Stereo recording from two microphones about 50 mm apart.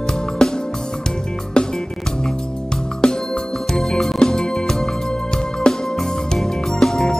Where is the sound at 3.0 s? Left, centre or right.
Centre.